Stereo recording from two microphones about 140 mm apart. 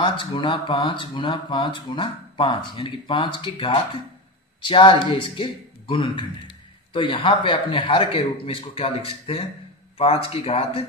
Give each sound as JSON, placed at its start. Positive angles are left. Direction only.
{"t": 0.0, "sound": "a man's voice", "side_deg": 35}